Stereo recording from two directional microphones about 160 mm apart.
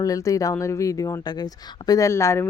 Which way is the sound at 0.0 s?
20° left (ahead or behind).